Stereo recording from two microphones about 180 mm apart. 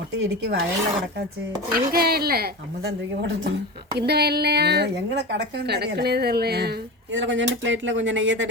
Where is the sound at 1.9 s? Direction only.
60° right (ahead or behind).